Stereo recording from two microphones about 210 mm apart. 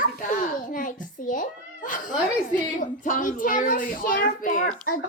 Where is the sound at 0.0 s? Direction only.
40° left (ahead or behind).